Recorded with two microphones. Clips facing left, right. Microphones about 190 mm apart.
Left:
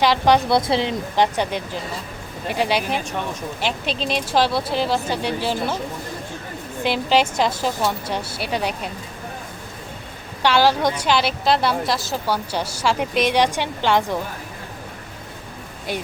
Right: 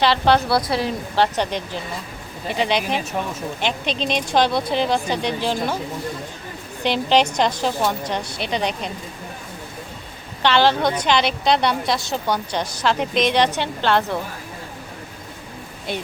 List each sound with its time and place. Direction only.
0.0 s a woman's voice: 15° left (ahead or behind)
6.8 s a woman's voice: 5° left (ahead or behind)
10.4 s a woman's voice: 10° left (ahead or behind)
15.9 s a woman's voice: 10° left (ahead or behind)